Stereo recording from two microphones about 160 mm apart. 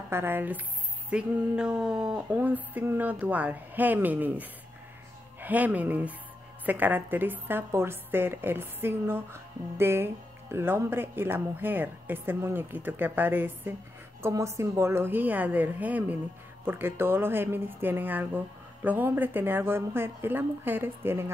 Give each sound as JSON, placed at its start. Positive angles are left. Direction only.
{"t": 0.1, "sound": "a woman's voice", "side_deg": -15}